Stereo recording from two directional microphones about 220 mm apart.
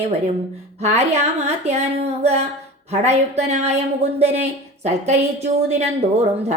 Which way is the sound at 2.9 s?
30° right (ahead or behind).